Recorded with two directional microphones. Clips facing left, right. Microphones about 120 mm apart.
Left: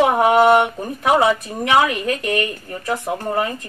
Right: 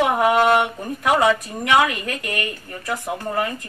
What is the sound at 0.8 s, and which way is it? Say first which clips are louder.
A woman's voice: left 2 dB; 10° left (ahead or behind).